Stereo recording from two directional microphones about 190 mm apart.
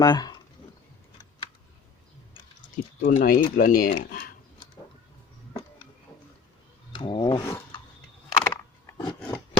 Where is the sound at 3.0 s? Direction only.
50° left (ahead or behind).